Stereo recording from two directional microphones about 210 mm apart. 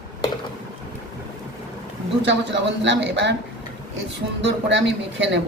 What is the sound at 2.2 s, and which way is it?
A man's voice, 60° right (ahead or behind).